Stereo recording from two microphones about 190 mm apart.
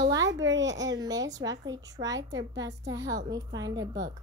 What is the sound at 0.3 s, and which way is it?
A woman's voice, 20° right (ahead or behind).